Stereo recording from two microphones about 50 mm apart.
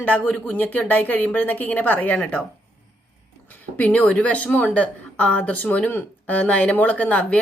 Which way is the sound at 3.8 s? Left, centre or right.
Left.